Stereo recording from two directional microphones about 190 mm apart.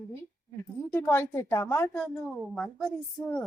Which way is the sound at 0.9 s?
10° left (ahead or behind).